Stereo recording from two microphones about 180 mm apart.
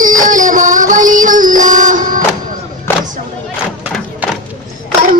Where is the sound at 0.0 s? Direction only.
45° right (ahead or behind).